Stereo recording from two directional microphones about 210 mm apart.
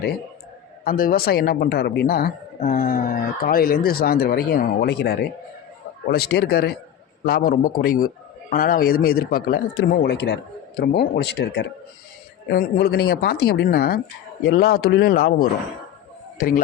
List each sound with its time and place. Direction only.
0.9 s speech: 45° left (ahead or behind)